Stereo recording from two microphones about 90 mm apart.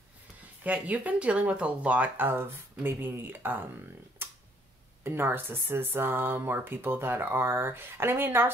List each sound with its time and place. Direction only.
0.7 s speech: 15° right (ahead or behind)